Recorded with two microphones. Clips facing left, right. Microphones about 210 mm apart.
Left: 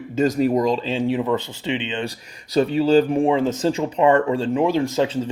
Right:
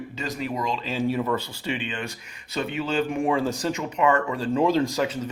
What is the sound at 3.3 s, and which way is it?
Speech, 20° left (ahead or behind).